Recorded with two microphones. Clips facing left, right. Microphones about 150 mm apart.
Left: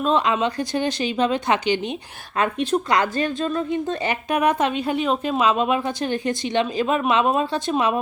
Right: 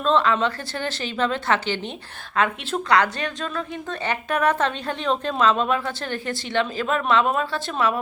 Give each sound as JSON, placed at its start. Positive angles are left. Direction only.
{"t": 0.0, "sound": "a woman's voice", "side_deg": 15}